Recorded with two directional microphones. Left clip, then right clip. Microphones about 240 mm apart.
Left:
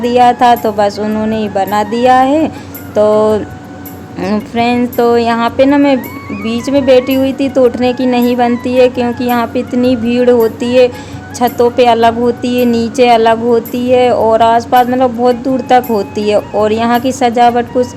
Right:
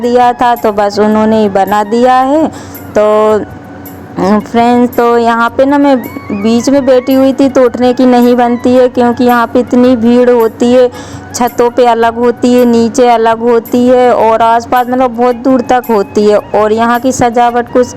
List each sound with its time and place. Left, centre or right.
0.0 s speech: right